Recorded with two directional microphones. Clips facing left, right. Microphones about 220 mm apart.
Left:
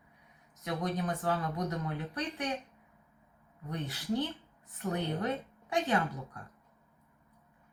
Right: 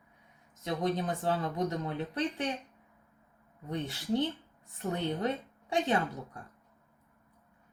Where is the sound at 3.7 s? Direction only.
25° right (ahead or behind).